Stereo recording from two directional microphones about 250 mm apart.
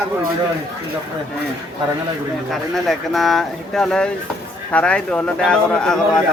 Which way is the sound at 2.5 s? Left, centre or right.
Centre.